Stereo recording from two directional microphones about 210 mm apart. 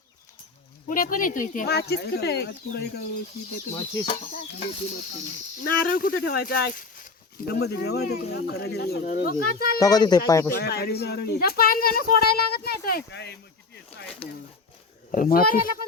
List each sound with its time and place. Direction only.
0.9 s speech: 40° left (ahead or behind)
4.2 s a sound: 30° left (ahead or behind)
5.5 s speech: 40° left (ahead or behind)
9.7 s speech: 15° left (ahead or behind)
10.5 s speech: 50° left (ahead or behind)
15.1 s speech: 40° left (ahead or behind)